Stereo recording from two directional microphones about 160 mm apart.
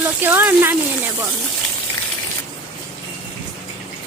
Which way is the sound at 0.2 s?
10° right (ahead or behind).